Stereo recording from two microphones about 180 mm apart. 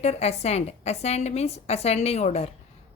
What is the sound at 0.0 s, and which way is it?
A woman's voice, 35° left (ahead or behind).